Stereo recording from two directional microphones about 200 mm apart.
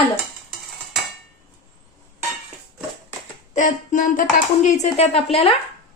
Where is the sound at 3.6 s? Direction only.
40° left (ahead or behind).